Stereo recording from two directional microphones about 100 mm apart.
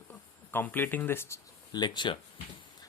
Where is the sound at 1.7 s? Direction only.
45° left (ahead or behind).